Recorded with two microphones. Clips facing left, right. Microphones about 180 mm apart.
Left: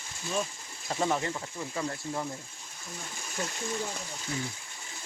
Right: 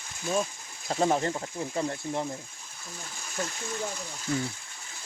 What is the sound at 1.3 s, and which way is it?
Speech, 25° right (ahead or behind).